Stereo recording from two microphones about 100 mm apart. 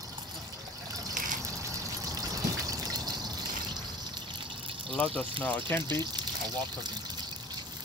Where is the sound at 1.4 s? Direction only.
35° right (ahead or behind).